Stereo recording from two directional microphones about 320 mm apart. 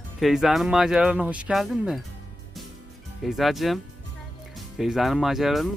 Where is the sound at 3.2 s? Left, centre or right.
Centre.